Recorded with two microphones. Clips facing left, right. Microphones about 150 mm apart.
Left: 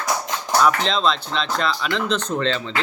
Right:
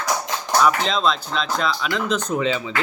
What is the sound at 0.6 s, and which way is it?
Speech, centre (ahead or behind).